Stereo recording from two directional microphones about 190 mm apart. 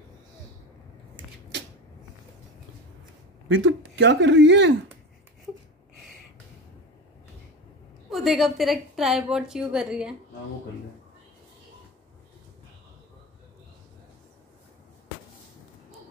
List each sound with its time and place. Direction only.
3.4 s speech: 85° right; by 4.7 s 70° right (ahead or behind)
8.1 s a woman's voice: centre (ahead or behind)